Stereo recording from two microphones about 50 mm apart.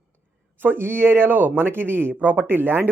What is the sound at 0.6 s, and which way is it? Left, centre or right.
Speech, right.